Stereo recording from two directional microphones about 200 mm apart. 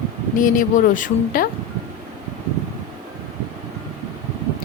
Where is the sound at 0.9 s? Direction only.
45° left (ahead or behind).